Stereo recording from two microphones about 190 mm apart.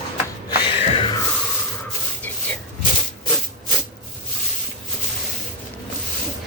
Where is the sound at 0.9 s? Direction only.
25° left (ahead or behind).